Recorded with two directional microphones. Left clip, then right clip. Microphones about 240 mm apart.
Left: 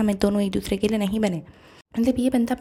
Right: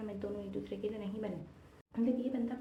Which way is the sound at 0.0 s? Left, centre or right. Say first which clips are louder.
Left 18 dB; left.